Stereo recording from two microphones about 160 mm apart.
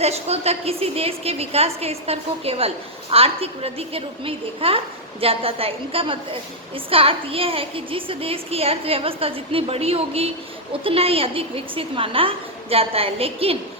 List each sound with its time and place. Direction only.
0.0 s a woman's voice: 40° right (ahead or behind)